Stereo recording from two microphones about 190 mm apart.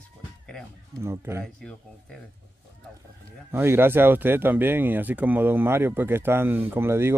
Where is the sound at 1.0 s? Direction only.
15° right (ahead or behind).